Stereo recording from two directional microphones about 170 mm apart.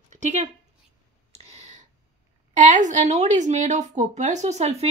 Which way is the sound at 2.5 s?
50° right (ahead or behind).